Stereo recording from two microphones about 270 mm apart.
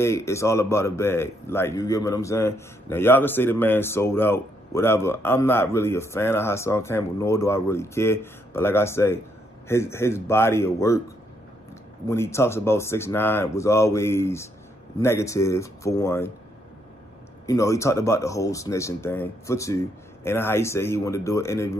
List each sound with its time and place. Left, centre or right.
0.0 s a man's voice: centre
12.1 s a man's voice: centre
17.5 s a man's voice: centre